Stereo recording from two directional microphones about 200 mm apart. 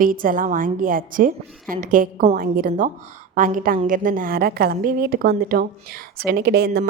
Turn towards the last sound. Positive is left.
turn(degrees=-50)  # may be behind; listen again after turning